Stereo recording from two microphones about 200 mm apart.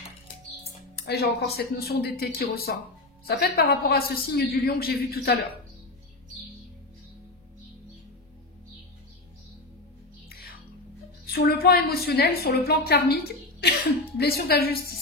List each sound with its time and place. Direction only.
0.9 s a man's voice: 50° left (ahead or behind)
10.3 s music: 50° left (ahead or behind)
11.2 s a woman's voice: 50° left (ahead or behind)